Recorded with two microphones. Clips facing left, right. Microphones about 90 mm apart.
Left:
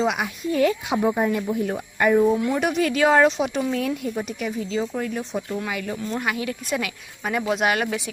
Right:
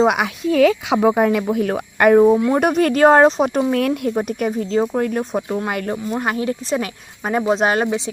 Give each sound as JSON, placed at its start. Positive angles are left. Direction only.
{"t": 0.0, "sound": "speech", "side_deg": -65}
{"t": 2.3, "sound": "speech", "side_deg": -40}
{"t": 3.7, "sound": "speech", "side_deg": -60}
{"t": 6.1, "sound": "speech", "side_deg": -35}